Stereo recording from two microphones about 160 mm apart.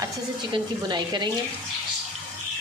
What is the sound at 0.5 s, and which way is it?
Speech, 25° right (ahead or behind).